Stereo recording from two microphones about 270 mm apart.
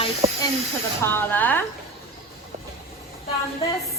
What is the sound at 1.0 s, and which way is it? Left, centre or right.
Speech, centre.